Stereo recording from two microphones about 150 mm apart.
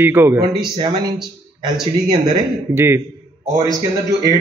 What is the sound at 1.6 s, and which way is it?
Speech, 30° right (ahead or behind).